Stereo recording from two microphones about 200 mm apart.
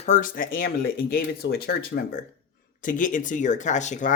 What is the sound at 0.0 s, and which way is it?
Speech, 40° left (ahead or behind).